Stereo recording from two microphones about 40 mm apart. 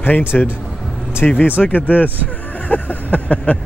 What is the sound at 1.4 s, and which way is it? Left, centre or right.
Speech, left.